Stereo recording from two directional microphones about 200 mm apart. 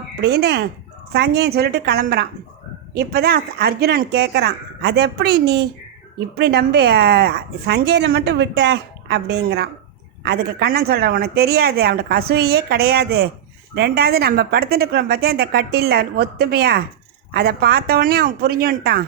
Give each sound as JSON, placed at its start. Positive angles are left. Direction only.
{"t": 0.2, "sound": "speech", "side_deg": -55}